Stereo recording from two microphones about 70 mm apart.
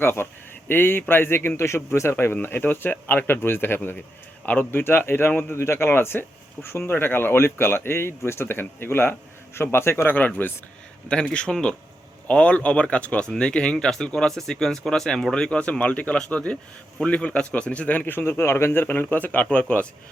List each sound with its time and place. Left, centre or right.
0.0 s speech: left
10.2 s a man's voice: left
11.1 s a man's voice: centre